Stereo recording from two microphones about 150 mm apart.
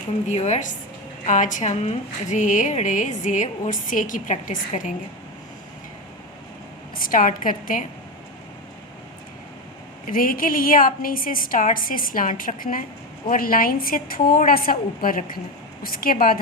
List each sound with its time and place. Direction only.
0.3 s a woman's voice: 50° left (ahead or behind)
7.0 s a woman's voice: 65° left (ahead or behind)
10.1 s a woman's voice: 70° left (ahead or behind)